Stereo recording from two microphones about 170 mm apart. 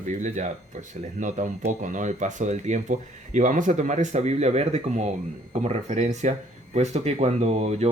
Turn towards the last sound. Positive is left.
turn(degrees=-40)  # may be behind; listen again after turning